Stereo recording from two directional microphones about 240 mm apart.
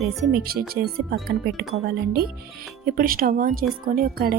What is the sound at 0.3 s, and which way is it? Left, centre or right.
Speech, right.